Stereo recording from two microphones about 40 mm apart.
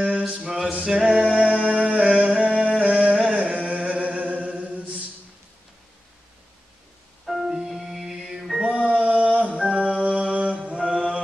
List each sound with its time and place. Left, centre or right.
0.3 s a sound: right
0.8 s music: centre
1.3 s music: right
1.7 s a sound: right
3.3 s chant: right
7.2 s music: centre
8.6 s music: right
10.0 s mantra: right
10.7 s mantra: right